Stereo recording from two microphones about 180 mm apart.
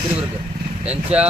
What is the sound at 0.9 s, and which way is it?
Speech, 5° right (ahead or behind).